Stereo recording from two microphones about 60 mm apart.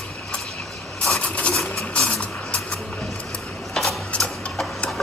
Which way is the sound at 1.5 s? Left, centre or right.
Centre.